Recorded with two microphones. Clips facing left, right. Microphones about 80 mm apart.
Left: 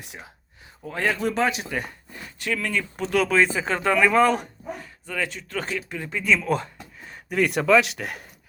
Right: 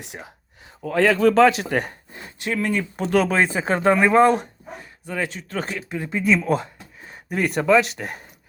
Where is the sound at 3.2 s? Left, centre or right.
Right.